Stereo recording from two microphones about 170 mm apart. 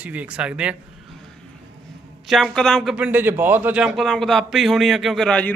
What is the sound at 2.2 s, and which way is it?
Speech, centre (ahead or behind).